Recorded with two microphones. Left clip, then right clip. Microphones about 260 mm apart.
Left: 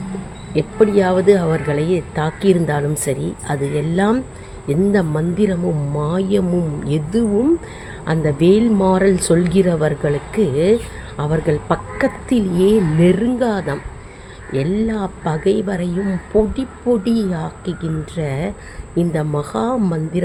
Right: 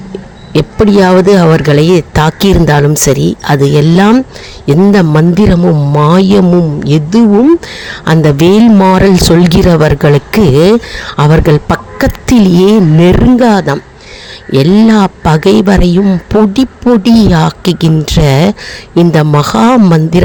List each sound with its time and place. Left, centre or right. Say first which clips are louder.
0.5 s speech: right 6 dB; right